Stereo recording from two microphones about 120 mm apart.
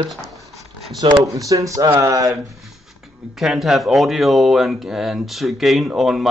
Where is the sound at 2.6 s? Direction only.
Centre (ahead or behind).